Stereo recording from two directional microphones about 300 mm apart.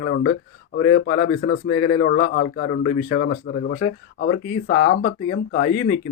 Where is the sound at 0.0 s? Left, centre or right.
Left.